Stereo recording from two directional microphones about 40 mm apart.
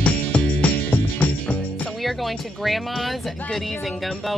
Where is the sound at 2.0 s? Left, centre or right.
Centre.